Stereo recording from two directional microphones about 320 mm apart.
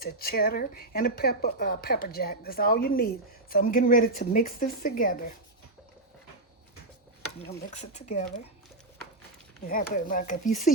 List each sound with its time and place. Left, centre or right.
0.0 s speech: left
7.4 s speech: left
9.6 s speech: left